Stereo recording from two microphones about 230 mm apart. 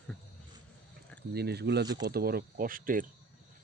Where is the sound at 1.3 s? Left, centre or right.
Right.